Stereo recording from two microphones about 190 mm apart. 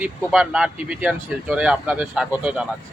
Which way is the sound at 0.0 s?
5° right (ahead or behind).